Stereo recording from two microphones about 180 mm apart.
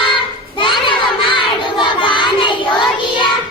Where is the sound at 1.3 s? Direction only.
25° left (ahead or behind).